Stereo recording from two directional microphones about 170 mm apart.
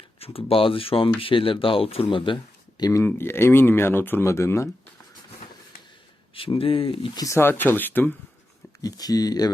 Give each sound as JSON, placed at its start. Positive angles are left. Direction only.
{"t": 0.2, "sound": "speech", "side_deg": 35}
{"t": 6.3, "sound": "speech", "side_deg": 30}
{"t": 8.8, "sound": "speech", "side_deg": 20}